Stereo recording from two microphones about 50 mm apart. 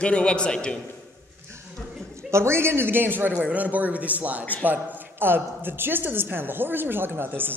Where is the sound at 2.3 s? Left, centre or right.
Right.